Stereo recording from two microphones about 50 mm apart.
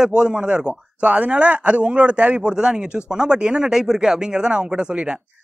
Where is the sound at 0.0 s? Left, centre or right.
Centre.